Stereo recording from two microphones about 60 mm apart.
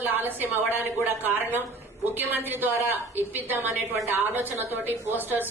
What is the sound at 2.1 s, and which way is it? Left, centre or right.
A woman's voice, right.